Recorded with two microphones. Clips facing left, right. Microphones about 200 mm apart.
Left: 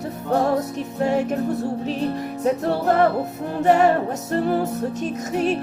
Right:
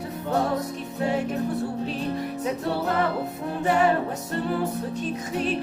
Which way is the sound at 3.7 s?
45° left (ahead or behind).